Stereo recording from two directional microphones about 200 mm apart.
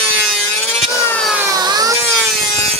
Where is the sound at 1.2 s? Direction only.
5° right (ahead or behind).